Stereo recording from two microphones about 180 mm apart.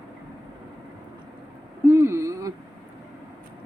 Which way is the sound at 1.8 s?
15° right (ahead or behind).